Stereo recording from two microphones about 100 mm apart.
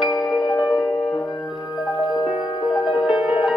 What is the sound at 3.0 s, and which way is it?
Music, 5° right (ahead or behind).